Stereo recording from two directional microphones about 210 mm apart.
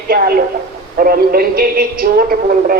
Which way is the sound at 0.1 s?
45° right (ahead or behind).